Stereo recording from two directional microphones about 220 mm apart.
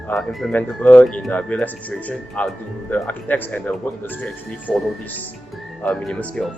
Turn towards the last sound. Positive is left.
turn(degrees=0)  # may be behind; listen again after turning